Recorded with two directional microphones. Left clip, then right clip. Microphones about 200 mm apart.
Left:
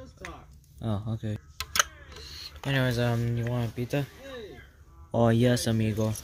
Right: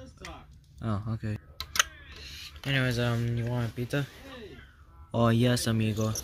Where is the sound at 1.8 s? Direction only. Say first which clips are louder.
Even; 25° left (ahead or behind); by 4.0 s 5° left (ahead or behind).